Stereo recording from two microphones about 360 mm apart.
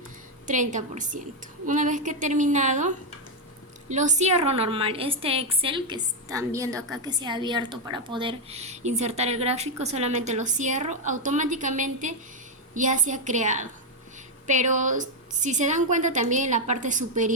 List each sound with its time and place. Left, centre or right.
0.4 s a woman's voice: right